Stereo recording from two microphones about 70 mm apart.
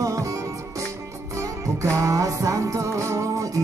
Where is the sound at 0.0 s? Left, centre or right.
Right.